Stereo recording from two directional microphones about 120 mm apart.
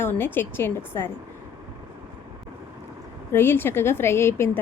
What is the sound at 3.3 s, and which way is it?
A woman's voice, 20° left (ahead or behind).